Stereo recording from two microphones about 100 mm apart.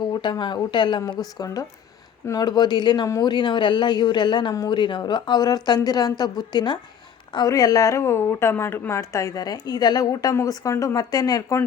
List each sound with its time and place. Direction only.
0.1 s speech: 50° left (ahead or behind)
2.2 s a woman's voice: 40° left (ahead or behind)